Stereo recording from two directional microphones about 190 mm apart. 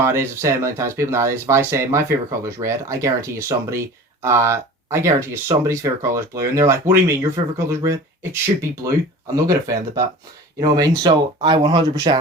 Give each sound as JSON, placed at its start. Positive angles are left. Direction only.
{"t": 0.0, "sound": "speech", "side_deg": -15}